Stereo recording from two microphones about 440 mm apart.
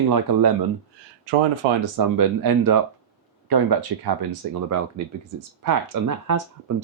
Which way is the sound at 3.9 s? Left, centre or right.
Right.